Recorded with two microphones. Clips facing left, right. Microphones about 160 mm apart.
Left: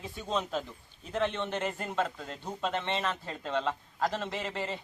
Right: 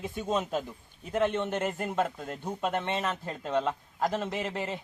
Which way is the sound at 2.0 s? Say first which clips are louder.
Right 2 dB; 50° right (ahead or behind).